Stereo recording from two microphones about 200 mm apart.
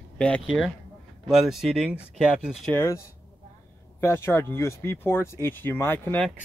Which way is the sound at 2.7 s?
10° left (ahead or behind).